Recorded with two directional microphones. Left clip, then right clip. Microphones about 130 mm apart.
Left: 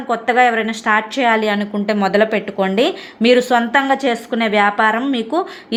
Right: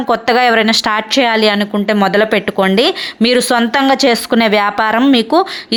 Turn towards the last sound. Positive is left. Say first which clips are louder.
# right 4 dB
turn(degrees=-45)  # may be behind; listen again after turning